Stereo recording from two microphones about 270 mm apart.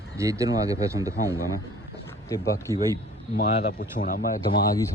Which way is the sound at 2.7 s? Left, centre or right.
Centre.